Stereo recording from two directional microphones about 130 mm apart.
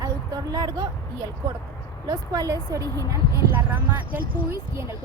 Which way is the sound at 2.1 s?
30° right (ahead or behind).